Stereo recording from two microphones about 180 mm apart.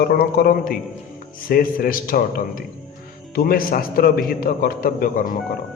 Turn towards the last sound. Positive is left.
turn(degrees=50)  # may be behind; listen again after turning